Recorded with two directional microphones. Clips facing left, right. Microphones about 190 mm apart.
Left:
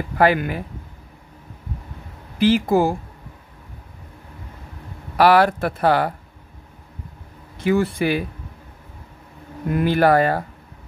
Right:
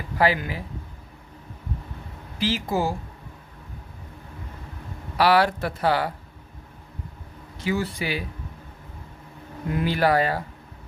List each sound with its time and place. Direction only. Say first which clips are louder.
0.2 s speech: left 5 dB; 55° left (ahead or behind)
2.3 s speech: left 9 dB; 55° left (ahead or behind)
5.1 s speech: left 5 dB; 50° left (ahead or behind)
7.5 s speech: left 7 dB; 55° left (ahead or behind)
9.8 s speech: left 5 dB; 50° left (ahead or behind)